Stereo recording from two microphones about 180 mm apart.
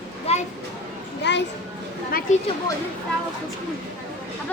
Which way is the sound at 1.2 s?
75° left (ahead or behind).